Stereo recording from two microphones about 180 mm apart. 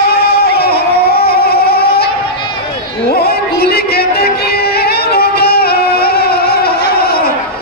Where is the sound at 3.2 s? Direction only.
60° left (ahead or behind).